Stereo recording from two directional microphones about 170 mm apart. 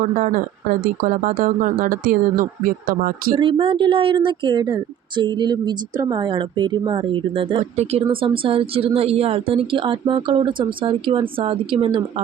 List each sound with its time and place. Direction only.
0.0 s speech: 50° right (ahead or behind)
3.3 s speech: 30° right (ahead or behind)